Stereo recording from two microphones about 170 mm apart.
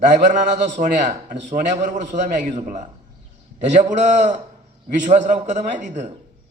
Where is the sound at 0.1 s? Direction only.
45° right (ahead or behind).